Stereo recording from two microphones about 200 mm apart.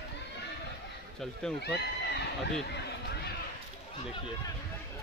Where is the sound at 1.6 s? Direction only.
55° left (ahead or behind).